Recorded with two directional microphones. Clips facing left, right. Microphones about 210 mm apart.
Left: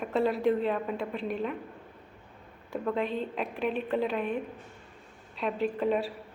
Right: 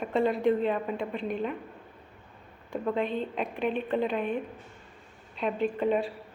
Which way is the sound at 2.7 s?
Centre (ahead or behind).